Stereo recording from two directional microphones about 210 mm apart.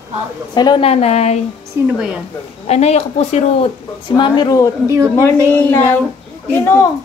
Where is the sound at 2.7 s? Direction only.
30° left (ahead or behind).